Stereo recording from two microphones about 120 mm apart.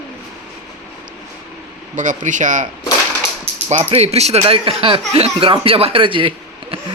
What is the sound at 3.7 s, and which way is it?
Speech, 60° right (ahead or behind).